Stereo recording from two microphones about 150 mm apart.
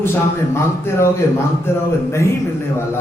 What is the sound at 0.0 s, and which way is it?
A man's voice, 15° left (ahead or behind).